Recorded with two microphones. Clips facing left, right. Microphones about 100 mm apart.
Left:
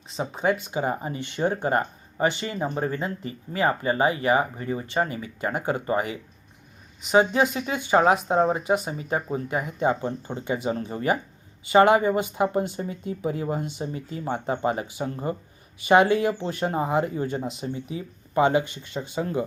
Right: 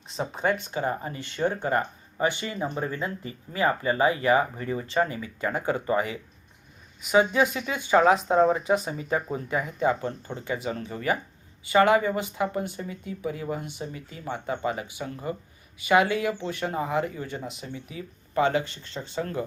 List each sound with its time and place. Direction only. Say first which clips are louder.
0.1 s speech: left 2 dB; centre (ahead or behind)